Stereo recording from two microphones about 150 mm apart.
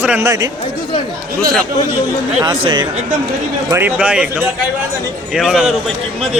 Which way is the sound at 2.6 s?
35° right (ahead or behind).